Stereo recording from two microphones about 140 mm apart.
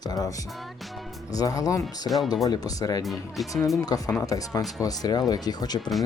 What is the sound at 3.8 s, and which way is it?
Speech, 25° left (ahead or behind).